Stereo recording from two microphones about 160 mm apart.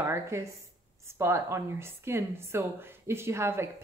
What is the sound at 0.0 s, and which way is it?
A woman's voice, 15° right (ahead or behind).